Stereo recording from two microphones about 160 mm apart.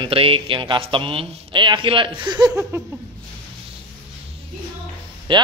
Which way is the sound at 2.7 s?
15° right (ahead or behind).